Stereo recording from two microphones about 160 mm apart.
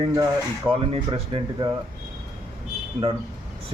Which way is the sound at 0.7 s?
35° right (ahead or behind).